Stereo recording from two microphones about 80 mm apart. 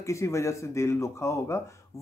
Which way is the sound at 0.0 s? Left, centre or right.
Left.